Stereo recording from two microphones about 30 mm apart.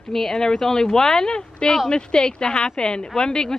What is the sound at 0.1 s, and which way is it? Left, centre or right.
A woman's voice, centre.